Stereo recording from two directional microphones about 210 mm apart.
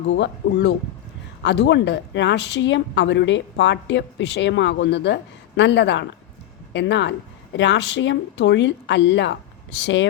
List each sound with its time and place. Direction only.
0.1 s speech: 55° left (ahead or behind)